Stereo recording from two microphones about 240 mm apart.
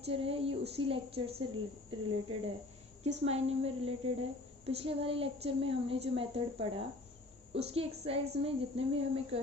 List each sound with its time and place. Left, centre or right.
0.0 s a woman's voice: right